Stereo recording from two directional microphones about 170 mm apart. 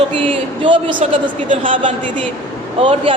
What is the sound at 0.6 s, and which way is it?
Speech, 30° right (ahead or behind).